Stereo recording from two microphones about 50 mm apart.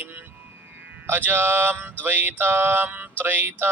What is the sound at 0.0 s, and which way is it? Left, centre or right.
Music, right.